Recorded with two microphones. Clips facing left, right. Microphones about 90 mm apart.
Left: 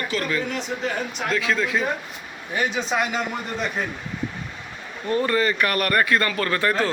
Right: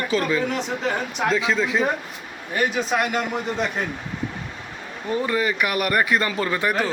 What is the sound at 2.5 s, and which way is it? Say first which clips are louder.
Speech: right 1 dB; 5° right (ahead or behind).